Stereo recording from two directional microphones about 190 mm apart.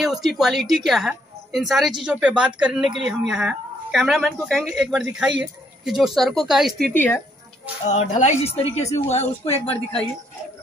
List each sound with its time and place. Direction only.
0.0 s a woman's voice: centre (ahead or behind)
6.9 s speech: 10° left (ahead or behind)
7.8 s a woman's voice: 40° left (ahead or behind)